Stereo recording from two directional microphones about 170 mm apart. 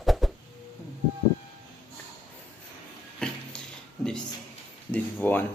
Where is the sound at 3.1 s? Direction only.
5° left (ahead or behind).